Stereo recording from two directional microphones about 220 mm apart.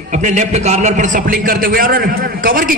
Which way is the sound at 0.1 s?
35° right (ahead or behind).